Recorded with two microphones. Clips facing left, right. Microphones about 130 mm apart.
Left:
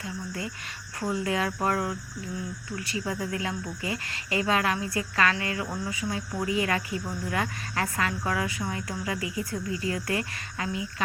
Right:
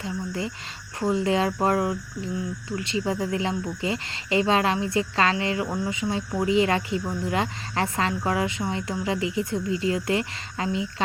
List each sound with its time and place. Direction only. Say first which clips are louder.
0.0 s speech: right 5 dB; 25° right (ahead or behind)